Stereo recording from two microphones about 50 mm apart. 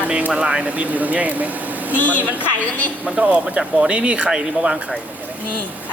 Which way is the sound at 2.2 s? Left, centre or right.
Right.